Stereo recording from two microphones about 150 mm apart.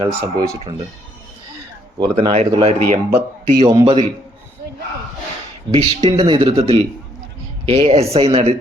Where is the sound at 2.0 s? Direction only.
35° right (ahead or behind).